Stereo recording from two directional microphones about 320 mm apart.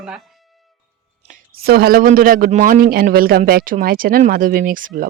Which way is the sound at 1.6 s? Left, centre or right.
Right.